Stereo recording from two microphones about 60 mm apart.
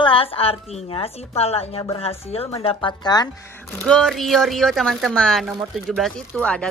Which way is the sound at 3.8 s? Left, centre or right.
Centre.